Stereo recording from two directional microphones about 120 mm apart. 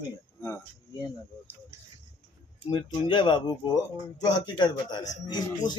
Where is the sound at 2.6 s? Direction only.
40° left (ahead or behind).